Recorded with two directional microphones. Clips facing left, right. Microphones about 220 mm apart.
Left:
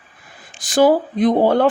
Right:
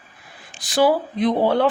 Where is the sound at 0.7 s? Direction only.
45° left (ahead or behind).